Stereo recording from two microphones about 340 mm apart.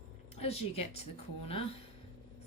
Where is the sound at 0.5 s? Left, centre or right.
Left.